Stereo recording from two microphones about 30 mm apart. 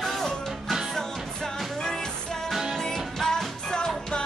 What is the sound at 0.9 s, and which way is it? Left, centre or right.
Music, left.